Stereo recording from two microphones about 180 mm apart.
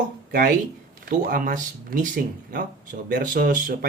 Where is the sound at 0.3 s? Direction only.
55° right (ahead or behind).